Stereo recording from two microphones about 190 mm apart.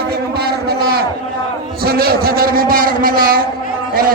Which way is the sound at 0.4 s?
55° right (ahead or behind).